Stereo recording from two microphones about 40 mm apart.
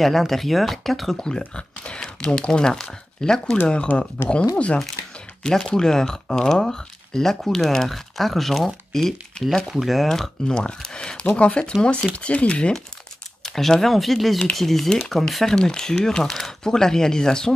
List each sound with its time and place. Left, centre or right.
0.0 s speech: centre
2.0 s speech: centre
3.6 s speech: left
5.4 s speech: centre
10.0 s speech: centre
10.5 s speech: left
13.6 s speech: centre